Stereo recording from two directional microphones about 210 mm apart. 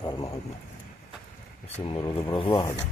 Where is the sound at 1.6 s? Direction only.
25° left (ahead or behind).